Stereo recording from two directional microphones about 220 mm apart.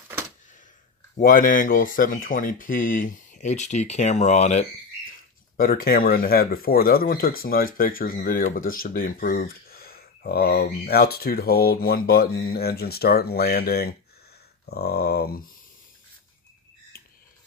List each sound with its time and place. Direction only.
1.1 s speech: 40° left (ahead or behind)